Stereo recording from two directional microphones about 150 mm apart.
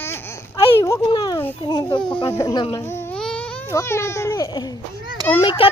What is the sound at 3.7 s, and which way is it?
Speech, 20° left (ahead or behind).